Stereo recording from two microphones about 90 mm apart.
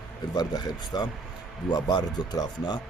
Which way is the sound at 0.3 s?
50° left (ahead or behind).